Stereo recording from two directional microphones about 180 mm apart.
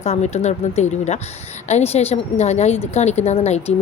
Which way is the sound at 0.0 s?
40° left (ahead or behind).